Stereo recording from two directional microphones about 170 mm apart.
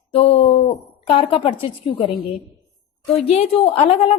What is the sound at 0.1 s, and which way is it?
A woman's voice, 35° left (ahead or behind).